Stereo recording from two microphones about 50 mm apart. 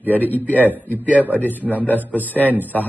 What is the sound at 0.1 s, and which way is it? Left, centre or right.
Speech, left.